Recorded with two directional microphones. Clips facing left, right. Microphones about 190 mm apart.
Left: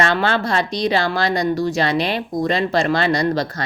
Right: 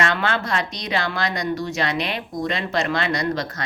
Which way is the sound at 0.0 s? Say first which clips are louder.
Left 4 dB; 30° left (ahead or behind).